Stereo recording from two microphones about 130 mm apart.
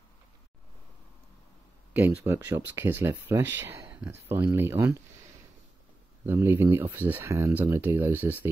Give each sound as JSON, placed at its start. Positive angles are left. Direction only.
{"t": 2.0, "sound": "speech", "side_deg": -15}
{"t": 6.2, "sound": "speech", "side_deg": -20}